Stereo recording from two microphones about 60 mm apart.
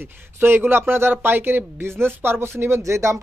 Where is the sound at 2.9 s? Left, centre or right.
Right.